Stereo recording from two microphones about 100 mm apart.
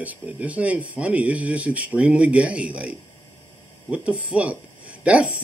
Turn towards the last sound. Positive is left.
turn(degrees=-15)  # may be behind; listen again after turning